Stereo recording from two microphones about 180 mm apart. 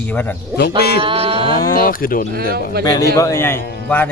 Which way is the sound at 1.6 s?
50° left (ahead or behind).